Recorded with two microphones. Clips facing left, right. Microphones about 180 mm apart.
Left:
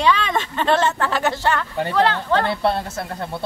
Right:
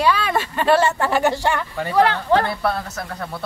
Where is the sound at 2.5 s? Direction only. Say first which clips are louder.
Left 2 dB; 30° left (ahead or behind).